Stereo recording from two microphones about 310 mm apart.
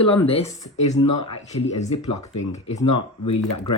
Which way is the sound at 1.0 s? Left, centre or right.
Left.